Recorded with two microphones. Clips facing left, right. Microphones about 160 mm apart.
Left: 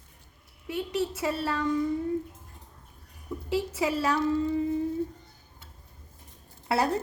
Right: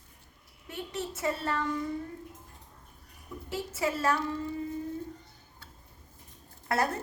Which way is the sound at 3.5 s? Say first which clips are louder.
Left 4 dB; 15° left (ahead or behind).